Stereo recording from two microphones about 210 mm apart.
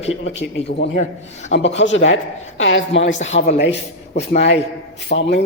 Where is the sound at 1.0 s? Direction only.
30° left (ahead or behind).